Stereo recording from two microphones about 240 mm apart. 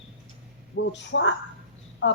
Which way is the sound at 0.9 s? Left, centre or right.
Left.